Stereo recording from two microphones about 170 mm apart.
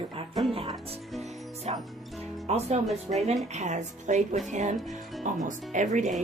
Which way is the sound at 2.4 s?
40° right (ahead or behind).